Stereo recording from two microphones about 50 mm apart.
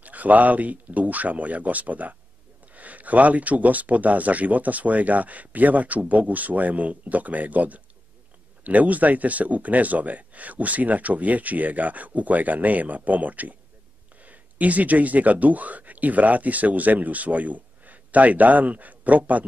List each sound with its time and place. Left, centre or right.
0.0 s speech: right